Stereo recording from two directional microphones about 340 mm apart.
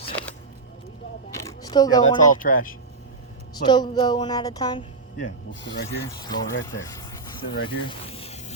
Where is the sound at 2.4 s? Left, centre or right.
Left.